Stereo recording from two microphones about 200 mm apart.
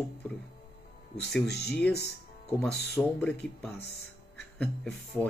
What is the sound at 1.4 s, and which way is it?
Speech, 55° left (ahead or behind).